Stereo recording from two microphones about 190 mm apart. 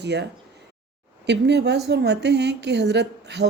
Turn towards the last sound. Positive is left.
turn(degrees=-65)  # may be behind; listen again after turning